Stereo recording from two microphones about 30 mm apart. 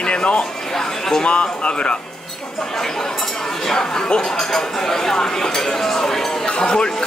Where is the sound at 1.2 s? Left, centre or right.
Left.